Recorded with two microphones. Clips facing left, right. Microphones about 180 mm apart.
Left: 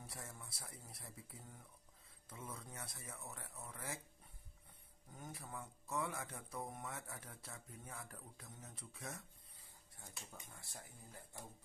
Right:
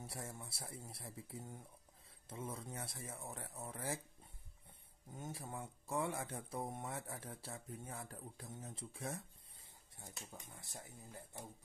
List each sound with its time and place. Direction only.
0.0 s speech: 25° right (ahead or behind)
5.1 s speech: 25° right (ahead or behind)